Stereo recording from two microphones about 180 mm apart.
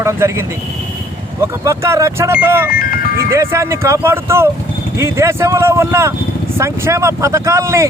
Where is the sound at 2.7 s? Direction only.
55° left (ahead or behind).